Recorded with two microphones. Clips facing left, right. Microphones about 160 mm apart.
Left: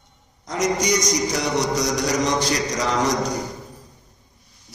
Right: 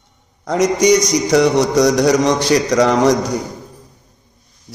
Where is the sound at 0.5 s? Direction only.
70° right (ahead or behind).